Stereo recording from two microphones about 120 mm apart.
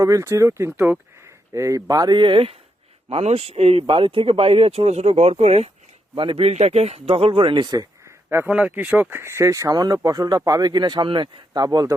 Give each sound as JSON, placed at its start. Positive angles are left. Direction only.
{"t": 0.0, "sound": "speech", "side_deg": -25}
{"t": 1.5, "sound": "speech", "side_deg": -25}
{"t": 6.1, "sound": "speech", "side_deg": -50}
{"t": 8.4, "sound": "speech", "side_deg": -10}